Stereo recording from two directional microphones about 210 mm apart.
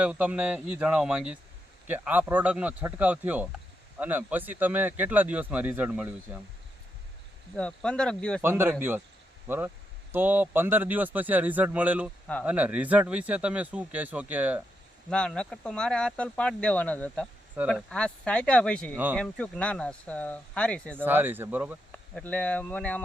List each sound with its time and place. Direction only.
0.0 s speech: 5° right (ahead or behind)
7.5 s speech: 5° left (ahead or behind)
8.4 s speech: 10° right (ahead or behind)
15.1 s speech: 5° left (ahead or behind)
21.0 s speech: 10° right (ahead or behind)
21.9 s speech: 5° left (ahead or behind)